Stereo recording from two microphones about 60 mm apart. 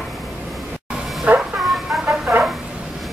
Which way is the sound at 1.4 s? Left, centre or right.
Centre.